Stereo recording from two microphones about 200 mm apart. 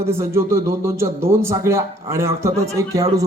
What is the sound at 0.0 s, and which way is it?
Speech, 10° right (ahead or behind).